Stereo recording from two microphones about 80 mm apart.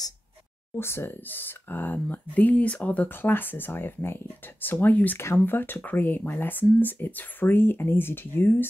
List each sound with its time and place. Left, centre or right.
0.7 s speech: left